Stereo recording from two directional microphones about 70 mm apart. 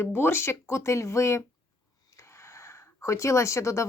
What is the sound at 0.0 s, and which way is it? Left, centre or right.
Speech, left.